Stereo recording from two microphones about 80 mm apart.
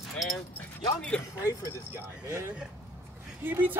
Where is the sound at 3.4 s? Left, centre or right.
Right.